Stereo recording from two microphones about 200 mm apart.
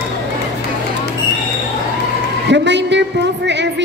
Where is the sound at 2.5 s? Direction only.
60° right (ahead or behind).